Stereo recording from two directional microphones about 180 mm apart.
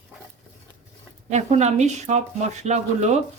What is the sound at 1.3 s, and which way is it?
Speech, 40° right (ahead or behind).